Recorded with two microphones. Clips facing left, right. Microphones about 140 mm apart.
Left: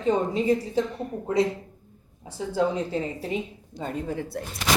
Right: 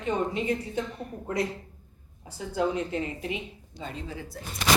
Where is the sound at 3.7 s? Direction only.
50° left (ahead or behind).